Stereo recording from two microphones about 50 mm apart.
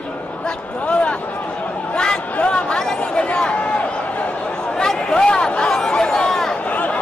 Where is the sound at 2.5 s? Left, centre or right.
Centre.